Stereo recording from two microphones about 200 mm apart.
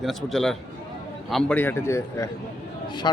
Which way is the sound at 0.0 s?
Centre (ahead or behind).